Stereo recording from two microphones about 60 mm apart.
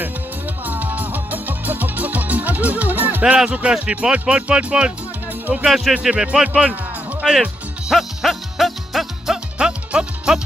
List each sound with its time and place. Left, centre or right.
0.7 s music: right
3.3 s speech: centre
5.5 s music: centre
5.9 s music: centre
7.9 s music: centre
9.6 s music: centre